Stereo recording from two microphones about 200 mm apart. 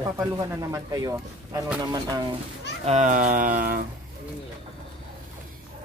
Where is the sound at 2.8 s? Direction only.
35° right (ahead or behind).